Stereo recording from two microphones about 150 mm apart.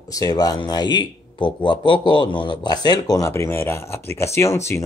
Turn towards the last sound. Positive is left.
turn(degrees=20)  # may be behind; listen again after turning